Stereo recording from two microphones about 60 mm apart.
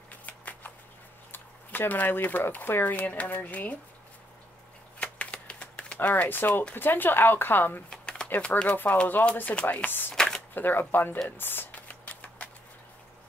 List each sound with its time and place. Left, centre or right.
0.3 s shuffling cards: left
1.3 s speech: left
4.9 s typewriter: left
5.9 s speech: left
7.9 s a sound: centre
8.4 s speech: left
10.1 s camera: centre
10.5 s speech: left
11.2 s typewriter: left